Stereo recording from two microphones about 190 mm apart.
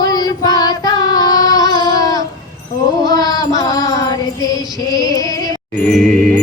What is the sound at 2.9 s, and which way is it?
Music, 20° left (ahead or behind).